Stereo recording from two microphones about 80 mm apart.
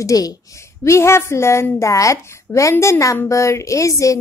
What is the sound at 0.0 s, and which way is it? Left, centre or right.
A woman's voice, left.